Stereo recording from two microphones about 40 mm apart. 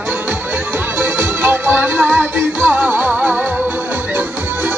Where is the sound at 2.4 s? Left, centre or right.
Right.